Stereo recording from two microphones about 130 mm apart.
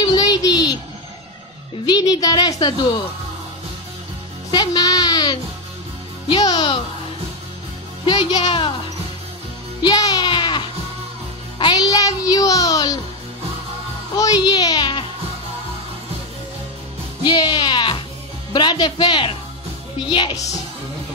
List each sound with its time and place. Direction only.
0.0 s a sound: 30° left (ahead or behind)
1.9 s a woman's voice: 30° left (ahead or behind)
4.5 s a child's voice: 30° left (ahead or behind)
8.0 s a woman's voice: 35° left (ahead or behind)
9.8 s a child's voice: 35° left (ahead or behind)
14.1 s a child's voice: 30° left (ahead or behind)
17.2 s a woman's voice: 35° left (ahead or behind)